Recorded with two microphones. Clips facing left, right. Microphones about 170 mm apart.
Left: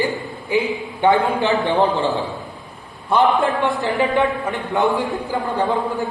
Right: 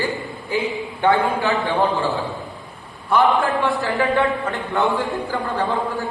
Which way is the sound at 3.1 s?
20° left (ahead or behind).